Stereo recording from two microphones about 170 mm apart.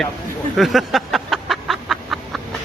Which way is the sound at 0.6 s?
Centre (ahead or behind).